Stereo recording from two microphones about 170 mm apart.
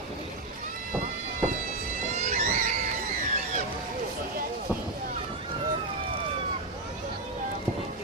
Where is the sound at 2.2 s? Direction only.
45° right (ahead or behind).